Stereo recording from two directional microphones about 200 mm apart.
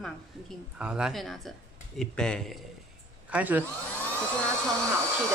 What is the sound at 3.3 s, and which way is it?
Speech, 10° right (ahead or behind).